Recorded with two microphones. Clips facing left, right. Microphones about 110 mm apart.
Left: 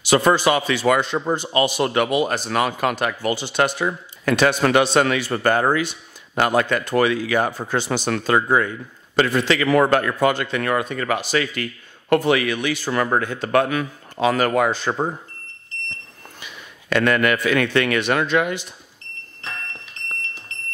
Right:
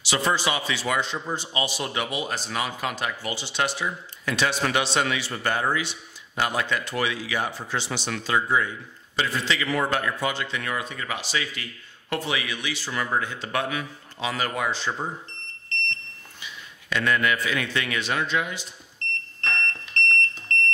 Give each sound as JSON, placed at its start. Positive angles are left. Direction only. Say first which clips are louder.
{"t": 0.0, "sound": "a man's voice", "louder": "left 8 dB", "side_deg": 50}
{"t": 16.3, "sound": "a man's voice", "louder": "left 1 dB", "side_deg": 60}
{"t": 18.9, "sound": "smoke detector", "louder": "right 8 dB", "side_deg": 5}